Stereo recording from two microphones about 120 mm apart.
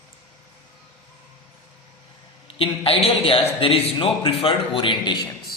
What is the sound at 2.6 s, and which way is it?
A man's voice, 55° left (ahead or behind).